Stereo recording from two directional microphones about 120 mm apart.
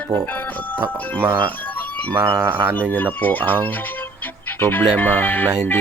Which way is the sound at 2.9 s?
15° left (ahead or behind).